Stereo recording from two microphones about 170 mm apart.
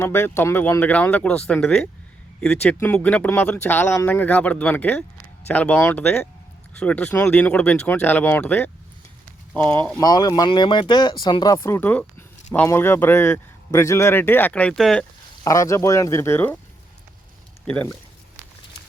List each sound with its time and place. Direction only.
0.0 s speech: 15° left (ahead or behind)
10.0 s speech: 20° left (ahead or behind); by 15.0 s 5° left (ahead or behind)
15.4 s speech: 20° left (ahead or behind)
17.7 s speech: 10° left (ahead or behind)